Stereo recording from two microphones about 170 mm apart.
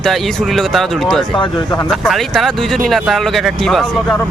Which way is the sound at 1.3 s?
25° left (ahead or behind).